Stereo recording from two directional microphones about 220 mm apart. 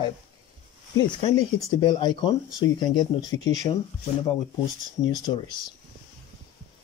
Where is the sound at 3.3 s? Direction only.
65° left (ahead or behind).